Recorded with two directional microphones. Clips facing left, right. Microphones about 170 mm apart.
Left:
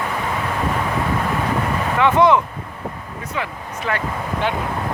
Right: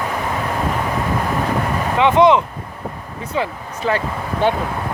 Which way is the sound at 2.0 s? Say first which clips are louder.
Right 2 dB; 20° right (ahead or behind).